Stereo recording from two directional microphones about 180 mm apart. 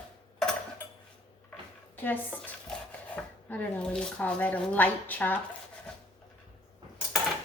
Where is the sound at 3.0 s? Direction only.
5° left (ahead or behind).